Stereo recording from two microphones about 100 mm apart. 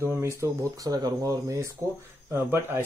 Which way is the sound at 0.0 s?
25° right (ahead or behind).